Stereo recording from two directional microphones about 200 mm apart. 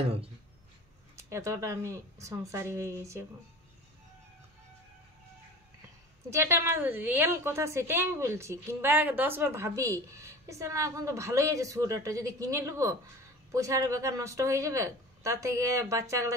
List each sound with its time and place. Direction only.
1.1 s a woman's voice: 15° right (ahead or behind)
6.3 s a woman's voice: 15° right (ahead or behind)